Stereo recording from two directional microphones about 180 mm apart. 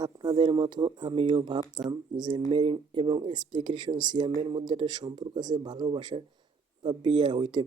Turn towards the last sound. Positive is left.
turn(degrees=-25)  # may be behind; listen again after turning